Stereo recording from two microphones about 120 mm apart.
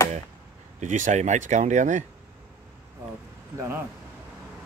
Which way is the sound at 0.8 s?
90° right.